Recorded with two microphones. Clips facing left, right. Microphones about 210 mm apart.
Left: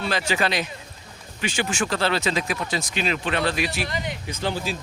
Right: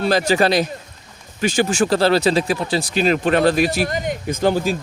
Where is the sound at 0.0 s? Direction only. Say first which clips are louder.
Right 8 dB; 40° right (ahead or behind).